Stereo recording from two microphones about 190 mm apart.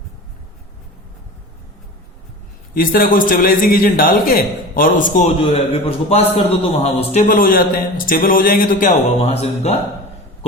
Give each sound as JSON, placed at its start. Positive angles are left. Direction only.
{"t": 2.7, "sound": "a man's voice", "side_deg": 50}
{"t": 5.4, "sound": "a man's voice", "side_deg": 30}
{"t": 9.3, "sound": "speech", "side_deg": 35}